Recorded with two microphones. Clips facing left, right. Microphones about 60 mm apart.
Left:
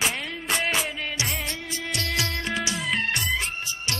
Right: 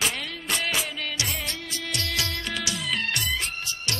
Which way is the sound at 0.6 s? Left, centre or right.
Left.